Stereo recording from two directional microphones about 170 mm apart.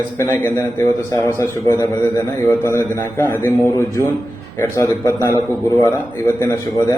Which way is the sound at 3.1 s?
15° left (ahead or behind).